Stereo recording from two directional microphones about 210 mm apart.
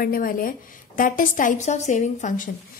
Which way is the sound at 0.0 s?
45° left (ahead or behind).